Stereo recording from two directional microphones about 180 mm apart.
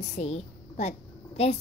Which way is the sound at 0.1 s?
40° left (ahead or behind).